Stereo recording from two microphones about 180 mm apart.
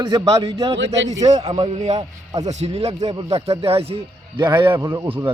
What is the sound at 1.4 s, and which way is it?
A man's voice, 35° right (ahead or behind).